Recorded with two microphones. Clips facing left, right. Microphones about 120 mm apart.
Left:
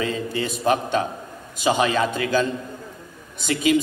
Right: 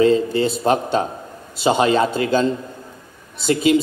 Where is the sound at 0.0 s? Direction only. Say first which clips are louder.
Right 10 dB; 30° right (ahead or behind).